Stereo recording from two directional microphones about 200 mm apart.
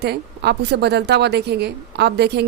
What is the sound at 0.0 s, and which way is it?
A woman's voice, 55° right (ahead or behind).